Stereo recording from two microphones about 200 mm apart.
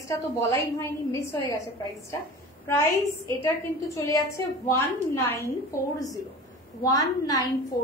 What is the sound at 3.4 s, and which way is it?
A woman's voice, 15° left (ahead or behind).